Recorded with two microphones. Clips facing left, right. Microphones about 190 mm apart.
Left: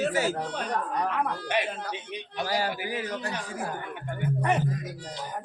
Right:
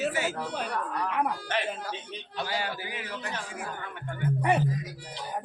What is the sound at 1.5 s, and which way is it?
Speech, 15° left (ahead or behind).